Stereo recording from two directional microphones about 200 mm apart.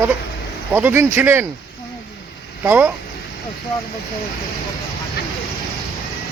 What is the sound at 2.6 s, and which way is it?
Speech, 10° right (ahead or behind).